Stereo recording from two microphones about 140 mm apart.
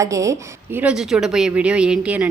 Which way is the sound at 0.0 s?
20° right (ahead or behind).